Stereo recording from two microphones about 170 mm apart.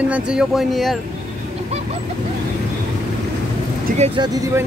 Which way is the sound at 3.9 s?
40° right (ahead or behind).